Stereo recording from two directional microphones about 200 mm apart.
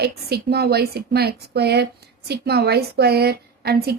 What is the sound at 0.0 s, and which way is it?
A woman's voice, 55° right (ahead or behind).